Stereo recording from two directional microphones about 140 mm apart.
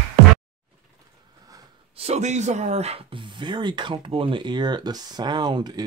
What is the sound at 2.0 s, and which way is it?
Speech, 50° right (ahead or behind).